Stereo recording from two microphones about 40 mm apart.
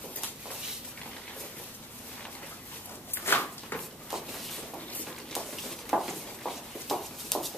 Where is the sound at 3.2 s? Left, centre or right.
Left.